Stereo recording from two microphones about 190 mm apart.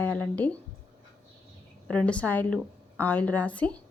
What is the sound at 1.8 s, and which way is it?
A woman's voice, 5° left (ahead or behind).